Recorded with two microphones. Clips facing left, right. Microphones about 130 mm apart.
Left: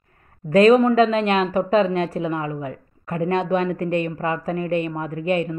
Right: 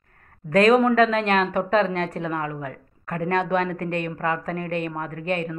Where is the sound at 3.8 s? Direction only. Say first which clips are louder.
Left 5 dB; 60° right (ahead or behind).